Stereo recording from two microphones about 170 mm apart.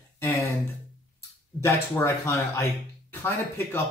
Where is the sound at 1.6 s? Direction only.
15° left (ahead or behind).